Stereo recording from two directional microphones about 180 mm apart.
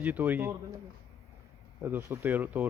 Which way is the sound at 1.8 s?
15° right (ahead or behind).